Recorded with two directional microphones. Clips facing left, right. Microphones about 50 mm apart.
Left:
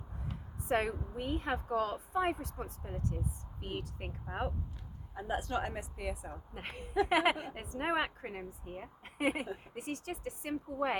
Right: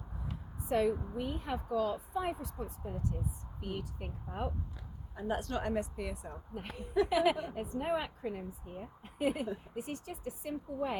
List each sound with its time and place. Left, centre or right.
0.6 s a woman's voice: left
5.3 s a woman's voice: centre
6.5 s a woman's voice: left